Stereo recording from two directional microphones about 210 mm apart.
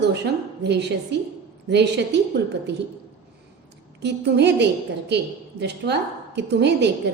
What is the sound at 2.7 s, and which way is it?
Speech, 55° right (ahead or behind).